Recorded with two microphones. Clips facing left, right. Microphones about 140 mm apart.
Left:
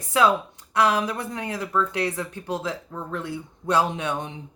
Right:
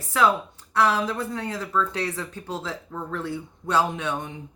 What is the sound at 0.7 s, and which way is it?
Speech, 15° left (ahead or behind).